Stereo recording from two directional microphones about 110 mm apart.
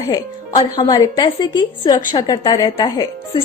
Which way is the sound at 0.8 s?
35° left (ahead or behind).